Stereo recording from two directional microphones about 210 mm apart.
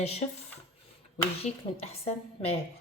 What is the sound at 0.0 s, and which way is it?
Speech, 30° left (ahead or behind).